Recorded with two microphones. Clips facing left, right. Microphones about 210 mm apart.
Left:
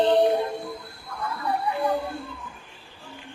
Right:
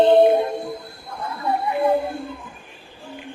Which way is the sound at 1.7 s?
15° right (ahead or behind).